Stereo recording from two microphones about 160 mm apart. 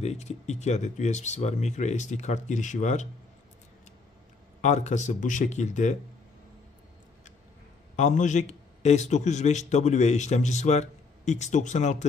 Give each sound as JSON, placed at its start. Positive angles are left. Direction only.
{"t": 0.0, "sound": "a man's voice", "side_deg": 45}
{"t": 4.6, "sound": "a man's voice", "side_deg": 45}
{"t": 7.9, "sound": "a man's voice", "side_deg": 50}